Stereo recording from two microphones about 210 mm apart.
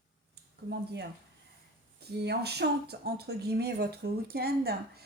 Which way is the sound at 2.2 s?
50° right (ahead or behind).